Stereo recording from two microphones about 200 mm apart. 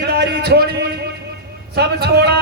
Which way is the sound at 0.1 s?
55° right (ahead or behind).